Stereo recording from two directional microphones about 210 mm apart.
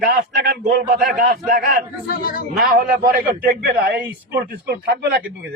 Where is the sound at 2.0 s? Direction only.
40° left (ahead or behind).